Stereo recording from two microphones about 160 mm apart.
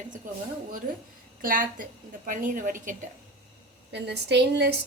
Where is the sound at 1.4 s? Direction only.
60° right (ahead or behind).